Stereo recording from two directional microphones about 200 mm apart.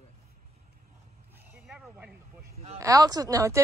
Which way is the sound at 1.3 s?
5° right (ahead or behind).